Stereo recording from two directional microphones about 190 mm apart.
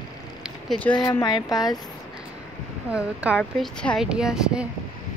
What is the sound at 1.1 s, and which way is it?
Speech, 20° left (ahead or behind).